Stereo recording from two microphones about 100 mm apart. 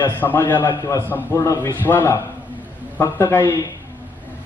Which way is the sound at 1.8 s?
20° left (ahead or behind).